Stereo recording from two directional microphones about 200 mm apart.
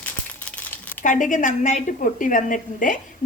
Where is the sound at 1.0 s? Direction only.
40° left (ahead or behind).